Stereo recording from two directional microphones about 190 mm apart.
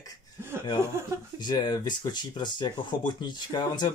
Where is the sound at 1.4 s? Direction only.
25° left (ahead or behind).